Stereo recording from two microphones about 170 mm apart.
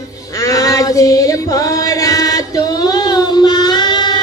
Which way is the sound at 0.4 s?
20° left (ahead or behind).